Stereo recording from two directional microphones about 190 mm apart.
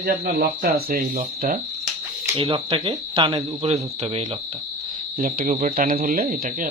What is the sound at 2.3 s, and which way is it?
A man's voice, 25° right (ahead or behind).